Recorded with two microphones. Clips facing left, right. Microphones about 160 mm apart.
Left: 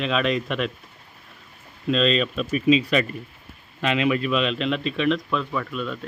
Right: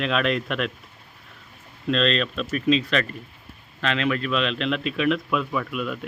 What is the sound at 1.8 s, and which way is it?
A man's voice, 5° left (ahead or behind).